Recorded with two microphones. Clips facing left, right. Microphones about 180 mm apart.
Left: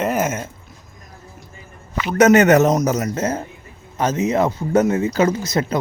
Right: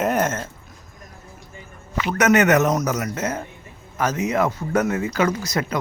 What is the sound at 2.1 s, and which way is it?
Speech, 30° left (ahead or behind).